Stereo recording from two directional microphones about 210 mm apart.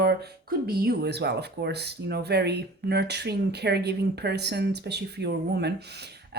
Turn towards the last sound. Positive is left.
turn(degrees=-50)  # may be behind; listen again after turning